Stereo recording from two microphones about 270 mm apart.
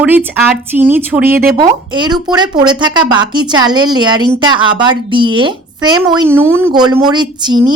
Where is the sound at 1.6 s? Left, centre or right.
Centre.